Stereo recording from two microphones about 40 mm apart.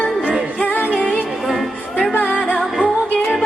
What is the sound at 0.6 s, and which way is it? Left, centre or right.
Music, left.